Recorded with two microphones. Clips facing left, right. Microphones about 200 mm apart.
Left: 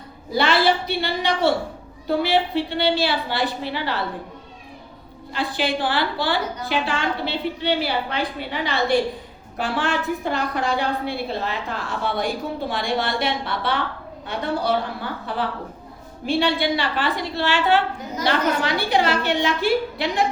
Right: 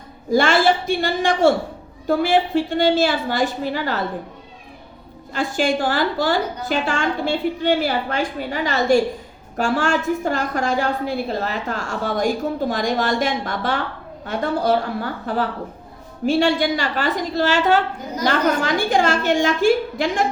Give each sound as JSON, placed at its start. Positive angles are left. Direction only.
{"t": 0.3, "sound": "a woman's voice", "side_deg": -45}
{"t": 5.3, "sound": "a woman's voice", "side_deg": -45}